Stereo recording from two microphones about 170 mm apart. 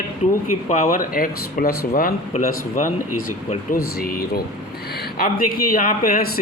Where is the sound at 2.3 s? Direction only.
40° left (ahead or behind).